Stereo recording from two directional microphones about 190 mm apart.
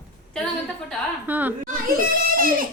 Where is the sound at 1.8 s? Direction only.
50° right (ahead or behind).